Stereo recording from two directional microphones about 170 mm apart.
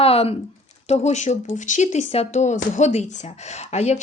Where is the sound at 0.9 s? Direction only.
40° left (ahead or behind).